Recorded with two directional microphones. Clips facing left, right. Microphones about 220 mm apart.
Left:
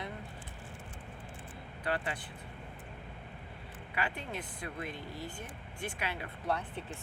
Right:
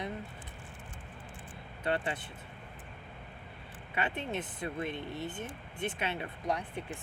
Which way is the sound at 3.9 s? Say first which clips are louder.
Right 3 dB; 25° right (ahead or behind).